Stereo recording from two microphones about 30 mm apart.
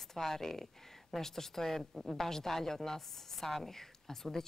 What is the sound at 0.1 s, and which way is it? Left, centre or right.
A woman's voice, centre.